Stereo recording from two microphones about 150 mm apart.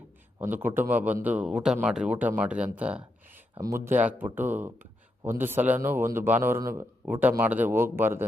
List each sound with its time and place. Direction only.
0.3 s speech: 15° right (ahead or behind)
2.7 s a sound: 10° right (ahead or behind)
3.6 s speech: 15° right (ahead or behind)